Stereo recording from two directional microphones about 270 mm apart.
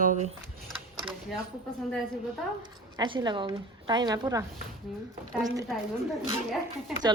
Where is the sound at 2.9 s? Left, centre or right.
Centre.